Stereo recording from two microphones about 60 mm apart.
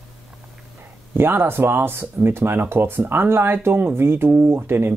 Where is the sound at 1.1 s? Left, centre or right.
Right.